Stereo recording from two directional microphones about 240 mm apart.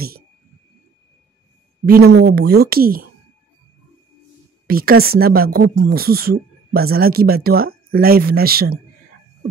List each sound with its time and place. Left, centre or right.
1.9 s speech: right
4.6 s speech: right